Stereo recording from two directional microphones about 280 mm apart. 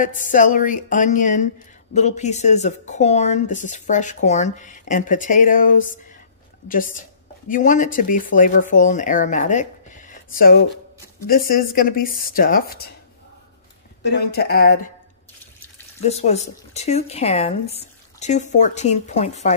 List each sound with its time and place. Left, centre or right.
0.0 s a woman's voice: left
7.4 s a woman's voice: left
14.1 s speech: left
16.0 s a woman's voice: left